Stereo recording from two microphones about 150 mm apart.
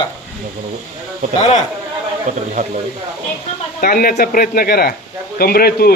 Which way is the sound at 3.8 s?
75° left (ahead or behind).